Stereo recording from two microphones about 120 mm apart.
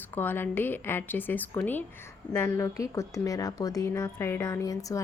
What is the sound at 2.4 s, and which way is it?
Speech, 25° left (ahead or behind).